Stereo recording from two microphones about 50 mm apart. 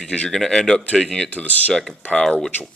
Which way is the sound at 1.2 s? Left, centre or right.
Left.